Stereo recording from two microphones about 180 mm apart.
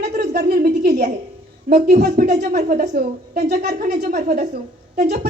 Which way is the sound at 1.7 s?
55° right (ahead or behind).